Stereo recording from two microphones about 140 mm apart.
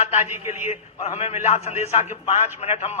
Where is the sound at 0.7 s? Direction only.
50° left (ahead or behind).